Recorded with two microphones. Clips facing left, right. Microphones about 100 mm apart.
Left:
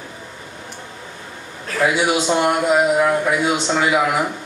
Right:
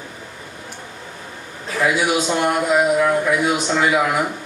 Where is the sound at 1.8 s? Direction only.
25° left (ahead or behind).